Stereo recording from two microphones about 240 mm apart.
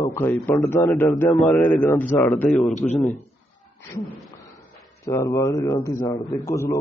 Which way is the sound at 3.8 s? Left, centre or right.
Centre.